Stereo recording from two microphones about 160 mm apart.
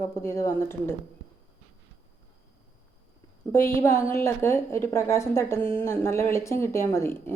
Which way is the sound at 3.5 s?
15° left (ahead or behind).